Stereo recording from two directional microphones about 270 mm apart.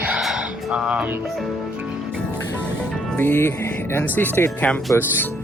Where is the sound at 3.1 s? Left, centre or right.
Centre.